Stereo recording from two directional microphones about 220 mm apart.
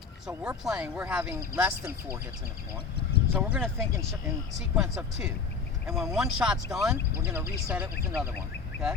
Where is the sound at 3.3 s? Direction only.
Centre (ahead or behind).